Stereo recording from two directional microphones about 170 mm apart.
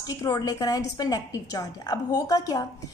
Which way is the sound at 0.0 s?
20° left (ahead or behind).